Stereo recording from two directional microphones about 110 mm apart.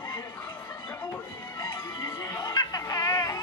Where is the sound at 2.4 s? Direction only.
35° left (ahead or behind).